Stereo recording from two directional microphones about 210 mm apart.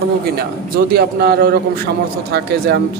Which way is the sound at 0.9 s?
50° right (ahead or behind).